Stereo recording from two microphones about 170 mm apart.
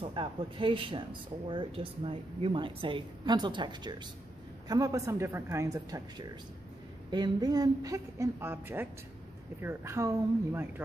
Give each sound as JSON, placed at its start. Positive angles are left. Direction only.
{"t": 0.0, "sound": "a woman's voice", "side_deg": -30}